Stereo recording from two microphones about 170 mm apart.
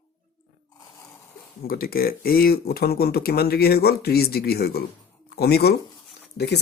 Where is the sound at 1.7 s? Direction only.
60° left (ahead or behind).